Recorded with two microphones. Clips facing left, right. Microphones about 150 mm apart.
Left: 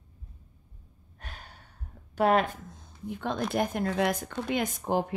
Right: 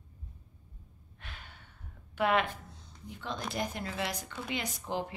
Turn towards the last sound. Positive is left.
turn(degrees=50)  # may be behind; listen again after turning